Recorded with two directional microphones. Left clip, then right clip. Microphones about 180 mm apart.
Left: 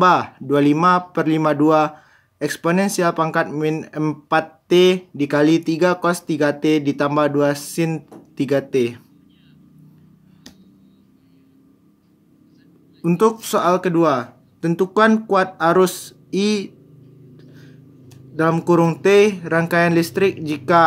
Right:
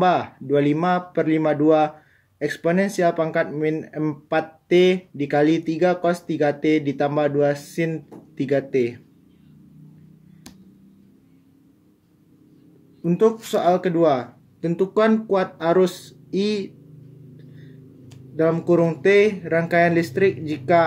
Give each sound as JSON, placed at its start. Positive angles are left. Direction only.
{"t": 0.0, "sound": "speech", "side_deg": 45}
{"t": 13.0, "sound": "speech", "side_deg": 45}
{"t": 18.3, "sound": "speech", "side_deg": 45}